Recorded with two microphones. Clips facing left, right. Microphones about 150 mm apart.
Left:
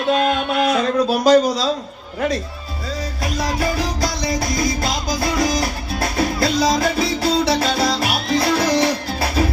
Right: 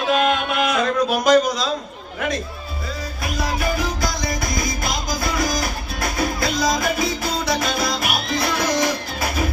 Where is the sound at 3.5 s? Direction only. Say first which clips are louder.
Left 1 dB; 35° left (ahead or behind).